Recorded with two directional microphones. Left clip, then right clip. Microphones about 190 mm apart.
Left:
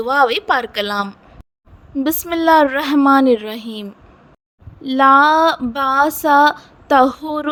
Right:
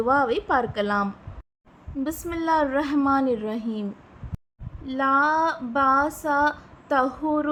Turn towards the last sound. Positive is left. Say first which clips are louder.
# left 8 dB
turn(degrees=50)  # may be behind; listen again after turning